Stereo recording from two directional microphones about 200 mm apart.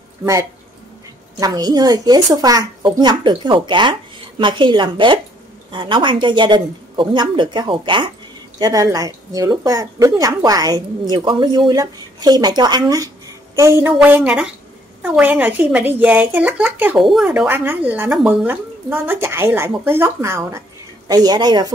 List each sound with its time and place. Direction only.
0.2 s speech: 15° right (ahead or behind)